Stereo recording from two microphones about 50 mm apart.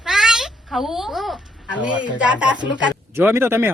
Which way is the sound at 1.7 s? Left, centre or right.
Right.